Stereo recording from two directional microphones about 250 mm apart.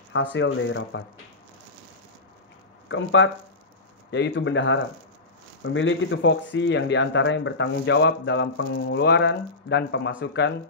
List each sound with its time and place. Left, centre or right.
0.1 s speech: left
2.9 s speech: left